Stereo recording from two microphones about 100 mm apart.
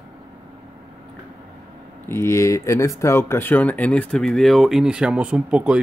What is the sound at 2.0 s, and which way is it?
Speech, 25° left (ahead or behind).